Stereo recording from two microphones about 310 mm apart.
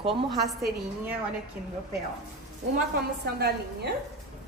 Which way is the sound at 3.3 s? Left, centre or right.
Right.